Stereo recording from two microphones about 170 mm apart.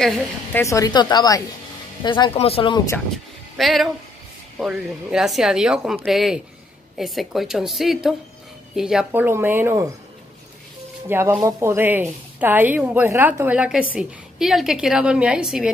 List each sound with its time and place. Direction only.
0.0 s a woman's voice: 10° left (ahead or behind); by 2.8 s 30° left (ahead or behind)
3.5 s a woman's voice: centre (ahead or behind)
11.1 s a woman's voice: 15° right (ahead or behind)